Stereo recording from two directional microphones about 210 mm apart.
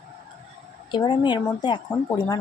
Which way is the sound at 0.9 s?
20° left (ahead or behind).